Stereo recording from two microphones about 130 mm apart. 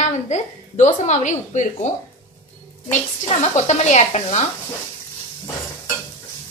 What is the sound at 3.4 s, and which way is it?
A woman's voice, 60° left (ahead or behind).